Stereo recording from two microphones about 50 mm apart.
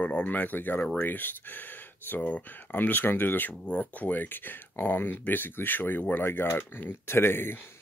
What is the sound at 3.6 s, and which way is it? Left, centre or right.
Speech, left.